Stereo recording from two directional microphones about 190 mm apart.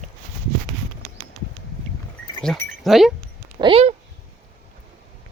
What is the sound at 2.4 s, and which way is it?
Speech, centre (ahead or behind).